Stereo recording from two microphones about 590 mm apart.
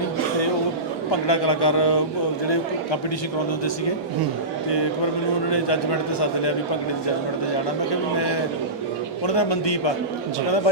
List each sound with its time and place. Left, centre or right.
1.3 s a man's voice: left
5.5 s a man's voice: left
9.2 s a man's voice: left